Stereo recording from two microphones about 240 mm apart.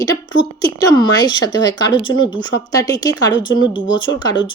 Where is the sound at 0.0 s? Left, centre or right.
Centre.